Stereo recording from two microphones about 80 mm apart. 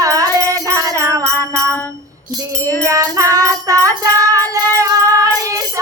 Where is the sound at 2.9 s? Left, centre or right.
Right.